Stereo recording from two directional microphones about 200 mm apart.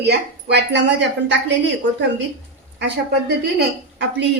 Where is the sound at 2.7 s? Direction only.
60° right (ahead or behind).